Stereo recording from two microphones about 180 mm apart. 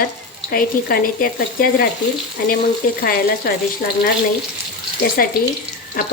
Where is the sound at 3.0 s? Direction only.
55° left (ahead or behind).